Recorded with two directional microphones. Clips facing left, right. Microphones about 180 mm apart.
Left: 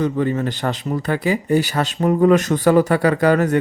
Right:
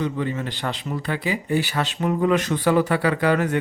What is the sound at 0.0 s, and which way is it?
A man's voice, 45° left (ahead or behind).